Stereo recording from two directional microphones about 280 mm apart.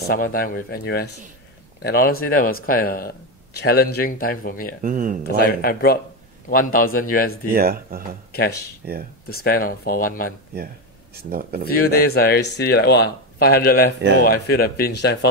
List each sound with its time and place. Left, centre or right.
0.1 s speech: left
4.8 s speech: right
5.3 s speech: left
7.5 s speech: right
8.3 s speech: left
8.8 s speech: right
9.4 s speech: left
11.1 s speech: right
11.6 s speech: left